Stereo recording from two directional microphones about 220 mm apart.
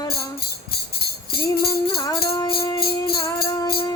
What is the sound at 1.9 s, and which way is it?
Music, 20° left (ahead or behind).